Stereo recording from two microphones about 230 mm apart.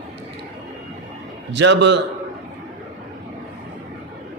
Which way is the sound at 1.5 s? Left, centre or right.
Right.